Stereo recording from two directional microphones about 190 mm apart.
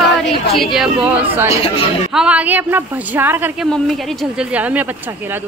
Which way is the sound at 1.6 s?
30° left (ahead or behind).